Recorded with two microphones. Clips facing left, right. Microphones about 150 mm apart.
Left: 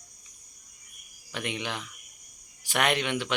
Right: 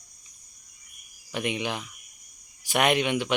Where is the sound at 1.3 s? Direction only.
15° right (ahead or behind).